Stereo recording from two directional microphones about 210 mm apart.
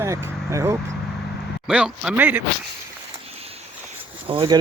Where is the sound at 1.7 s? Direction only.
5° right (ahead or behind).